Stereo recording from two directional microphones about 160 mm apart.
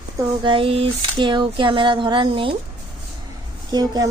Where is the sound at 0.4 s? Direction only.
35° right (ahead or behind).